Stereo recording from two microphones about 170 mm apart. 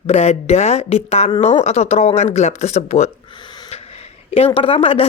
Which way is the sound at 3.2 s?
25° left (ahead or behind).